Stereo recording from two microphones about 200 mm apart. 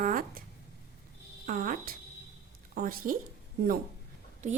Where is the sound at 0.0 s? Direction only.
45° right (ahead or behind).